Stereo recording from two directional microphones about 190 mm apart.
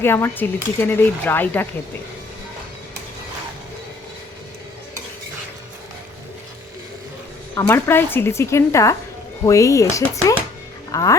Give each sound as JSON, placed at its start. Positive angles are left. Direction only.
{"t": 0.0, "sound": "speech", "side_deg": 10}
{"t": 7.5, "sound": "speech", "side_deg": 10}